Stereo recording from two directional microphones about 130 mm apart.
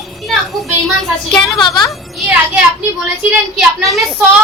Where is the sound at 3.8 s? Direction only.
Centre (ahead or behind).